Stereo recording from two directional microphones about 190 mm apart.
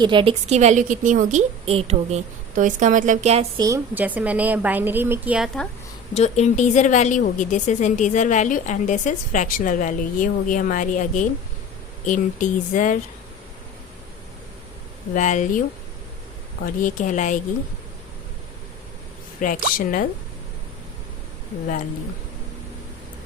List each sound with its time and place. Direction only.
0.0 s a woman's voice: 25° right (ahead or behind)
3.6 s a woman's voice: 15° right (ahead or behind)
6.1 s a woman's voice: 35° left (ahead or behind)
15.1 s a woman's voice: 40° left (ahead or behind)
16.6 s a woman's voice: 45° left (ahead or behind)
19.4 s speech: 45° left (ahead or behind)